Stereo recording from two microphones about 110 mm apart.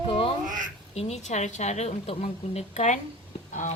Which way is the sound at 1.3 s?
90° left.